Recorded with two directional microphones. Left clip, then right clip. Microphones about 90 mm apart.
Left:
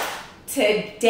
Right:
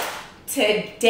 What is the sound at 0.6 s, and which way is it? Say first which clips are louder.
Speech: even; 5° right (ahead or behind).